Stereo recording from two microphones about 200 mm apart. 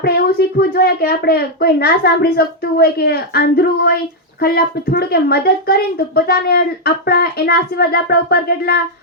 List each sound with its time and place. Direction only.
0.0 s a woman's voice: 50° left (ahead or behind)